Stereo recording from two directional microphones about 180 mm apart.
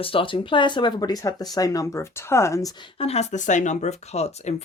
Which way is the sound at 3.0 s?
35° left (ahead or behind).